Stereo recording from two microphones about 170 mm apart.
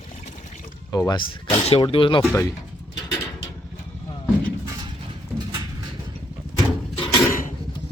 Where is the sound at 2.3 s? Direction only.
20° left (ahead or behind).